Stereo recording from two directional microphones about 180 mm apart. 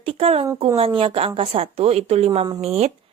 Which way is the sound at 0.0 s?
35° right (ahead or behind).